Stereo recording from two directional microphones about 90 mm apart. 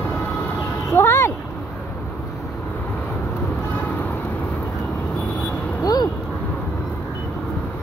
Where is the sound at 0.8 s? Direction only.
30° left (ahead or behind).